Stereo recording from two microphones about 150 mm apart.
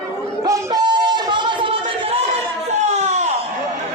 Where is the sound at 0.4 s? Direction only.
25° right (ahead or behind).